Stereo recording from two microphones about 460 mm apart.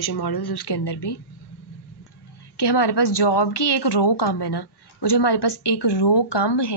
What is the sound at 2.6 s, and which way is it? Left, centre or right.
Speech, left.